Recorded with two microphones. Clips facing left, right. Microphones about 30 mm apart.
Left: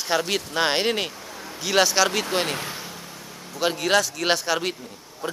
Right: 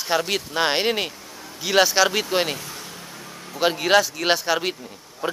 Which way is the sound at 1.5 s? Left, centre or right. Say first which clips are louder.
Right 2 dB; centre.